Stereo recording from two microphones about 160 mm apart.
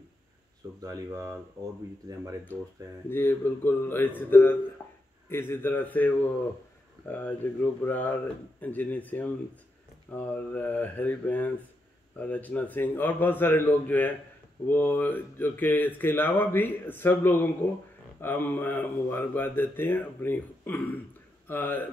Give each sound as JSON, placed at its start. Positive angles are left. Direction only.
{"t": 0.8, "sound": "speech", "side_deg": -20}
{"t": 3.1, "sound": "speech", "side_deg": 15}